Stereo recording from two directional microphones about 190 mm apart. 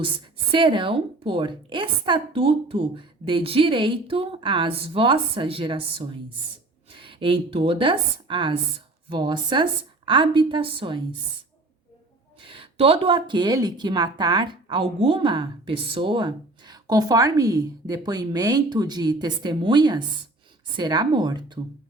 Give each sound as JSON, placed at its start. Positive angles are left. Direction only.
{"t": 0.5, "sound": "a woman's voice", "side_deg": -25}
{"t": 12.4, "sound": "speech", "side_deg": -25}